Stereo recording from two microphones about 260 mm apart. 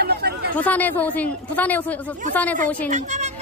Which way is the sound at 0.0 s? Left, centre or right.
Right.